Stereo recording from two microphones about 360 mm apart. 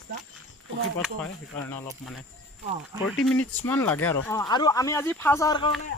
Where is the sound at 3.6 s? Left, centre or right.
Centre.